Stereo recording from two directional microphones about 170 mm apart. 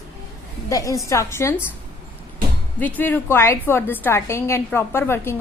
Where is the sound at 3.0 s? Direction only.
10° left (ahead or behind).